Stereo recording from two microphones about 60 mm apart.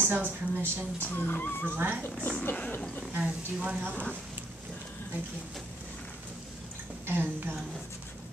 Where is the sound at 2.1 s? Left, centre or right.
Centre.